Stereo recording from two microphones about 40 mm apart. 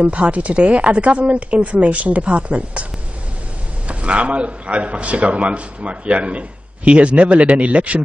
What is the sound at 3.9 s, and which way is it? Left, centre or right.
Speech, right.